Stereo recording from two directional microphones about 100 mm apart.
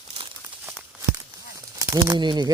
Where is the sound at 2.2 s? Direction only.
45° right (ahead or behind).